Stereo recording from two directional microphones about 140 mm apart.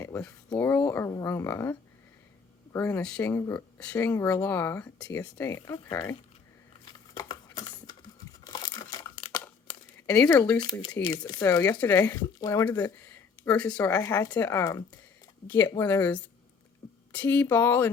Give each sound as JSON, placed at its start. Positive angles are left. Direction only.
{"t": 0.0, "sound": "speech", "side_deg": 15}
{"t": 2.7, "sound": "speech", "side_deg": 10}
{"t": 3.3, "sound": "speech", "side_deg": 20}
{"t": 3.8, "sound": "speech", "side_deg": 10}
{"t": 5.5, "sound": "speech", "side_deg": 25}
{"t": 6.8, "sound": "a sound", "side_deg": 30}
{"t": 8.4, "sound": "crumpling", "side_deg": 30}
{"t": 10.1, "sound": "speech", "side_deg": 10}
{"t": 10.6, "sound": "speech", "side_deg": 35}
{"t": 11.8, "sound": "speech", "side_deg": 15}
{"t": 13.9, "sound": "speech", "side_deg": 25}